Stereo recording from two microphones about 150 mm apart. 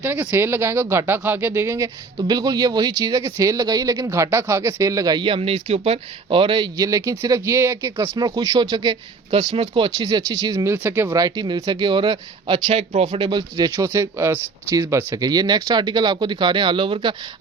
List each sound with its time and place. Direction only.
0.0 s speech: 15° right (ahead or behind)
2.1 s speech: 30° right (ahead or behind)
13.6 s speech: 20° right (ahead or behind)